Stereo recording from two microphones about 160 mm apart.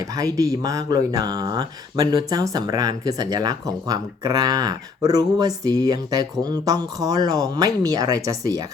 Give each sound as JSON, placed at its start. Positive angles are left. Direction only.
{"t": 0.2, "sound": "speech", "side_deg": -20}